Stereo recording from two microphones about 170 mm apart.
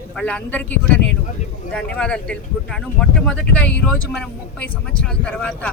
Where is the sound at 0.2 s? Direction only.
5° left (ahead or behind).